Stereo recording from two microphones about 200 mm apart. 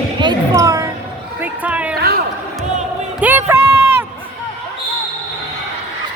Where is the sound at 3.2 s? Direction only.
10° right (ahead or behind).